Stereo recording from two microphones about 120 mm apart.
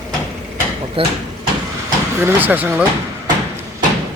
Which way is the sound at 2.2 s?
15° right (ahead or behind).